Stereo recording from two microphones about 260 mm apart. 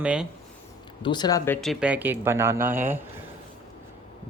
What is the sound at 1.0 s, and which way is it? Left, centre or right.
Speech, centre.